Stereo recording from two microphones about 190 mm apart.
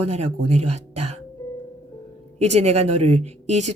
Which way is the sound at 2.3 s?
35° right (ahead or behind).